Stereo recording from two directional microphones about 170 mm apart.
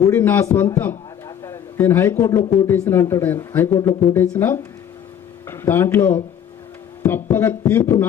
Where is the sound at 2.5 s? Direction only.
15° left (ahead or behind).